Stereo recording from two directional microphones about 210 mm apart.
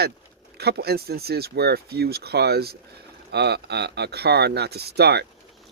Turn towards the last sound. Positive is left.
turn(degrees=-50)  # may be behind; listen again after turning